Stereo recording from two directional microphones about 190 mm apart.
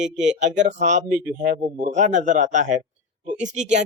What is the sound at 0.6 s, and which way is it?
Speech, 40° right (ahead or behind).